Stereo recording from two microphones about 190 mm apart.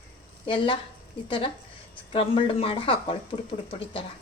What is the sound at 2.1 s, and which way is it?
Speech, 30° left (ahead or behind).